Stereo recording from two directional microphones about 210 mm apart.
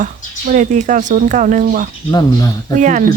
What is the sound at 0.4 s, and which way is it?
Speech, 35° right (ahead or behind).